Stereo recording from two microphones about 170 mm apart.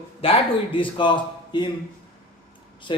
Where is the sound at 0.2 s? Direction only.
30° left (ahead or behind).